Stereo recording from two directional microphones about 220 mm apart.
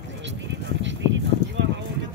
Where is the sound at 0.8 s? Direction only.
55° right (ahead or behind).